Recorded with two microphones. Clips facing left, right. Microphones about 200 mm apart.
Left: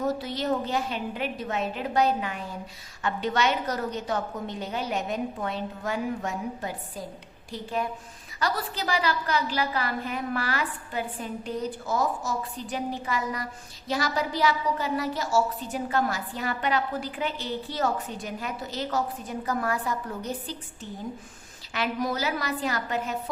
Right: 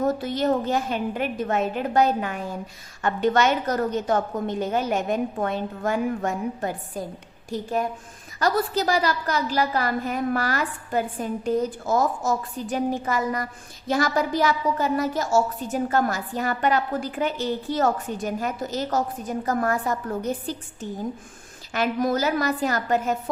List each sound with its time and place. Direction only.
0.0 s a woman's voice: 50° right (ahead or behind)
21.7 s a woman's voice: 45° right (ahead or behind)